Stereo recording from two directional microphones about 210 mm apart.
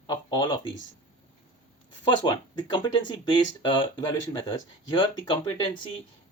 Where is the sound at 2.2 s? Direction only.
20° left (ahead or behind).